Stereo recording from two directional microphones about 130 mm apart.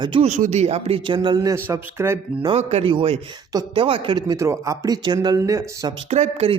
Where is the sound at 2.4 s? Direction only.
45° right (ahead or behind); by 5.9 s 25° right (ahead or behind).